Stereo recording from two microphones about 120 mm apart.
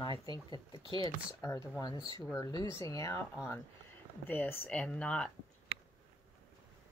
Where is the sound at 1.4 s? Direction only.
25° left (ahead or behind).